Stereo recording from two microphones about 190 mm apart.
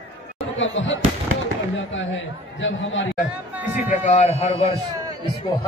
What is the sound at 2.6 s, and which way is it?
Speech, 85° left.